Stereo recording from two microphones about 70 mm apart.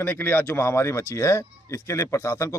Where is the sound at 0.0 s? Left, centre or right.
Left.